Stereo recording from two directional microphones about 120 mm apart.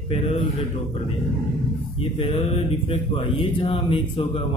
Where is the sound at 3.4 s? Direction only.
50° left (ahead or behind).